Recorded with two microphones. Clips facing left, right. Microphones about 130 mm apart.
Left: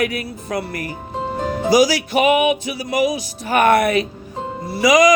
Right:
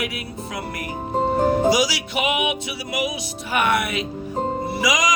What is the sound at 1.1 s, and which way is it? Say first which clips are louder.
Music: right 5 dB; 45° right (ahead or behind).